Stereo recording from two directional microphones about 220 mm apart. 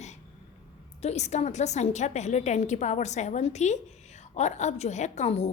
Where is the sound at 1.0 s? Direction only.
30° left (ahead or behind).